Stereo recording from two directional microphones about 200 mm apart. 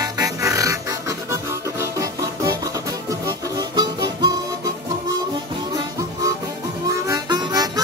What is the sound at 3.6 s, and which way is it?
Harmonica, 20° right (ahead or behind).